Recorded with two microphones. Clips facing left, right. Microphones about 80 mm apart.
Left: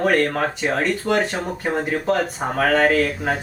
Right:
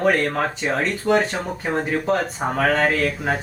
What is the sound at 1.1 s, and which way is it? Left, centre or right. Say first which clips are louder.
Speech: right 3 dB; centre.